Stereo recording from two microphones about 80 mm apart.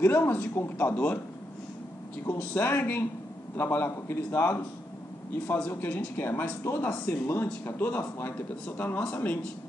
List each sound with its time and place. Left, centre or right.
0.0 s speech: left
2.2 s speech: left
5.7 s speech: left